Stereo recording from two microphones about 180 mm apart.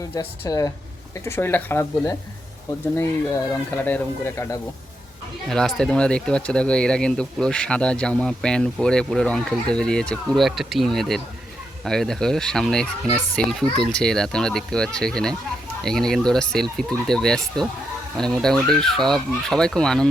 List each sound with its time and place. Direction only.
0.1 s speech: 15° left (ahead or behind)
3.7 s speech: 10° left (ahead or behind)